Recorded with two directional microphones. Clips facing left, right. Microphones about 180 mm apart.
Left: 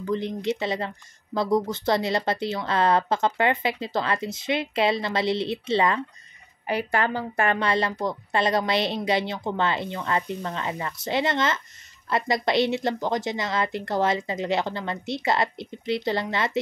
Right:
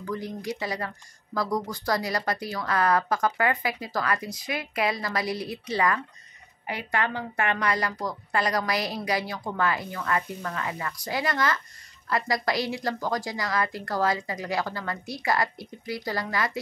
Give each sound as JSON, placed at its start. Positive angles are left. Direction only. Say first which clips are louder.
{"t": 0.0, "sound": "speech", "louder": "left 6 dB", "side_deg": 20}